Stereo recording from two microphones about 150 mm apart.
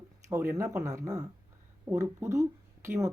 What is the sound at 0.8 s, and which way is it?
Speech, 20° right (ahead or behind).